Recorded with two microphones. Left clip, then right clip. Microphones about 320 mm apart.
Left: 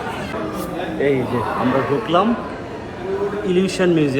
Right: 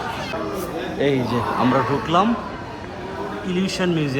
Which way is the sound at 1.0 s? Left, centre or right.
Right.